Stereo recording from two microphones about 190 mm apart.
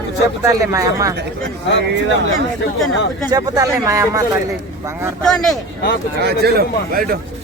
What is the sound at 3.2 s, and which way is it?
Speech, 20° right (ahead or behind).